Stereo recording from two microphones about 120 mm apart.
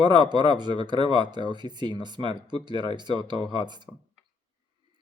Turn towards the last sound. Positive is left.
turn(degrees=-40)  # may be behind; listen again after turning